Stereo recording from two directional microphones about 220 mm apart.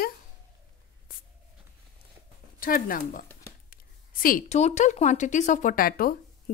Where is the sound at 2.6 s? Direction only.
40° left (ahead or behind).